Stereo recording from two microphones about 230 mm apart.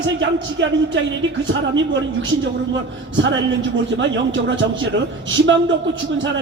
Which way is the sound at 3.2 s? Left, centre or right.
Right.